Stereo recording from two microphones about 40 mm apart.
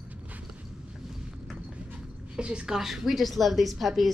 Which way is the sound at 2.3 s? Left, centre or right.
Right.